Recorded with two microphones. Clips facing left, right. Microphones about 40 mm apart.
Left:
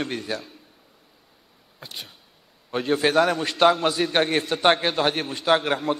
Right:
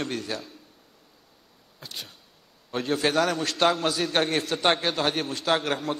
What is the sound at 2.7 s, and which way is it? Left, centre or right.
A man's voice, centre.